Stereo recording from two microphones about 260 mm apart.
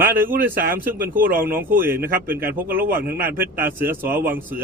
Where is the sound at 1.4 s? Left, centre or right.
Centre.